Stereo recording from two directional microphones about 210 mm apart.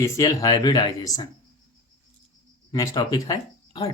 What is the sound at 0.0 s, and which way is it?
Speech, 15° left (ahead or behind).